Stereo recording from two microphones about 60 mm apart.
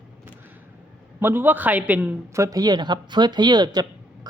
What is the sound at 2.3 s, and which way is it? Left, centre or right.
Speech, right.